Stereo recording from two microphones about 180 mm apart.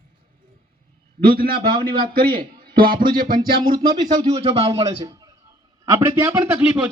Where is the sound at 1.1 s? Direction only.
55° right (ahead or behind).